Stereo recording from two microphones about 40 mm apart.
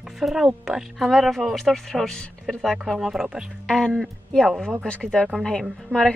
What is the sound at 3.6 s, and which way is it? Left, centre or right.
Speech, centre.